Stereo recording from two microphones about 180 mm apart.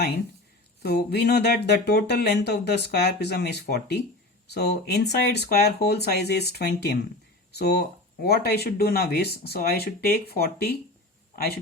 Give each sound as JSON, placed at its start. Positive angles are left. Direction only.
{"t": 0.8, "sound": "speech", "side_deg": 60}